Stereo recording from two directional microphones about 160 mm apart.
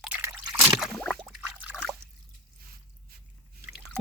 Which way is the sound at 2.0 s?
15° right (ahead or behind).